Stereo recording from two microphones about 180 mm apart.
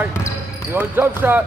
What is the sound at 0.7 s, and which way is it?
Speech, 10° right (ahead or behind).